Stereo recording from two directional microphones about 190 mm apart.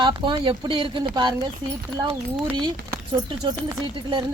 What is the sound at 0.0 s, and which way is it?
Speech, 25° right (ahead or behind).